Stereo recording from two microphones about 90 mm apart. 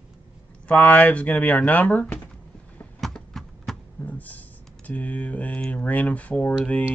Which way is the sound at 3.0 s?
5° left (ahead or behind).